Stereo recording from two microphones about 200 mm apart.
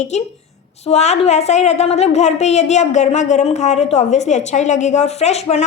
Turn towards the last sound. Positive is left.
turn(degrees=35)  # may be behind; listen again after turning